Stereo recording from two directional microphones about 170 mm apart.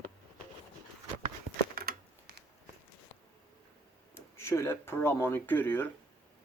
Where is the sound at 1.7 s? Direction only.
60° right (ahead or behind).